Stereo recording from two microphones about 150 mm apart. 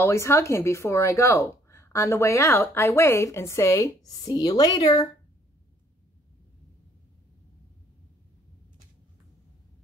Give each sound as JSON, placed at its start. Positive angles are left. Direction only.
{"t": 0.0, "sound": "speech", "side_deg": 20}